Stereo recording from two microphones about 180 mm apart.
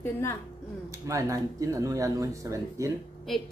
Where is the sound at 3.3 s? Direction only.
Centre (ahead or behind).